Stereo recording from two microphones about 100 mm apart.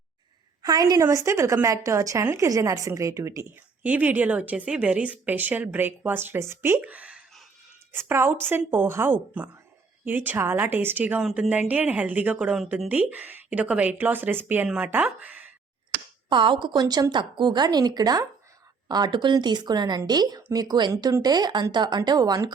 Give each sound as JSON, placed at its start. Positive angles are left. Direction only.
{"t": 0.6, "sound": "a woman's voice", "side_deg": -40}
{"t": 1.0, "sound": "a woman's voice", "side_deg": -30}
{"t": 3.8, "sound": "a woman's voice", "side_deg": -15}
{"t": 7.9, "sound": "a woman's voice", "side_deg": -25}
{"t": 16.3, "sound": "a woman's voice", "side_deg": -55}